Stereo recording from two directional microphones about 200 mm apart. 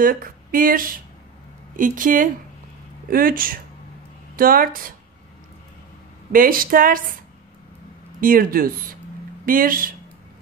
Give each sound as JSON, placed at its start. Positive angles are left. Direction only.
{"t": 0.0, "sound": "speech", "side_deg": -45}
{"t": 6.3, "sound": "speech", "side_deg": -45}
{"t": 8.2, "sound": "speech", "side_deg": -45}